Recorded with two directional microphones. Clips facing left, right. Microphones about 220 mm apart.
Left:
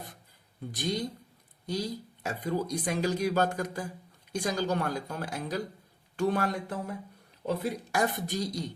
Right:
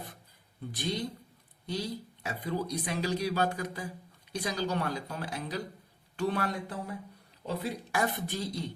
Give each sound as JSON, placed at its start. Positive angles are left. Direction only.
{"t": 0.7, "sound": "speech", "side_deg": 45}